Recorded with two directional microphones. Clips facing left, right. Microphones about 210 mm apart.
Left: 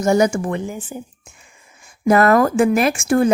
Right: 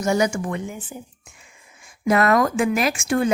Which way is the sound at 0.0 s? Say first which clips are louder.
Left 5 dB; 45° left (ahead or behind).